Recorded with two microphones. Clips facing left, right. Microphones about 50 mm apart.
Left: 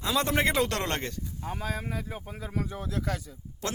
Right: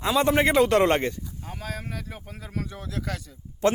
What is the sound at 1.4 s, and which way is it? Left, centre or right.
Speech, left.